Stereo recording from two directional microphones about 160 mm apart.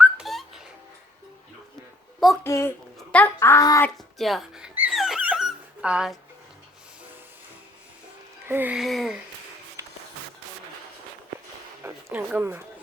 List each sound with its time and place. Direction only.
0.0 s whistling: centre (ahead or behind)
2.4 s a child's voice: 15° left (ahead or behind)
3.8 s music: centre (ahead or behind)
4.9 s dog: 5° right (ahead or behind)
8.4 s speech: 10° right (ahead or behind)
9.8 s a sound: 15° right (ahead or behind)
11.8 s speech: 15° right (ahead or behind)